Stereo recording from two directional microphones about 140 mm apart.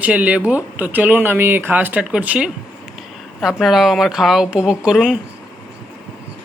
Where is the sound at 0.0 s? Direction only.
10° right (ahead or behind).